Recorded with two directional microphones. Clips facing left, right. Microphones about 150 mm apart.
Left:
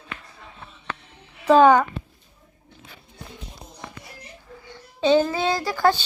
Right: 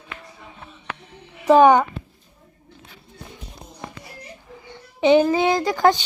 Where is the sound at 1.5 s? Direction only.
15° right (ahead or behind).